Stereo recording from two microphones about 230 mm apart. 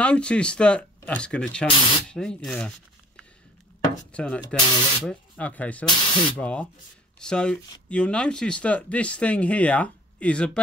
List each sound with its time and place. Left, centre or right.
0.0 s speech: centre
1.7 s speech: left
2.0 s speech: centre
4.1 s speech: centre
4.6 s speech: left
5.0 s speech: centre
5.9 s speech: left
6.3 s speech: centre